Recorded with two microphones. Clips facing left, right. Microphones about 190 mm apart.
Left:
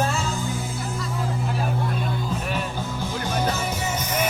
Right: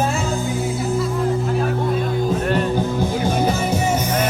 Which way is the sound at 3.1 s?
10° right (ahead or behind).